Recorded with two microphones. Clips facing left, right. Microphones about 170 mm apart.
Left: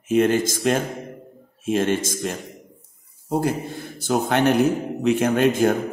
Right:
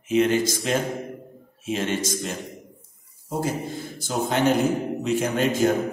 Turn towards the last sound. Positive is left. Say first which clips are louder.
# left 3 dB
turn(degrees=55)  # may be behind; listen again after turning